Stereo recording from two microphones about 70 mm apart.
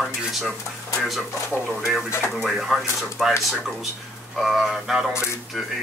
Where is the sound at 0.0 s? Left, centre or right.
Centre.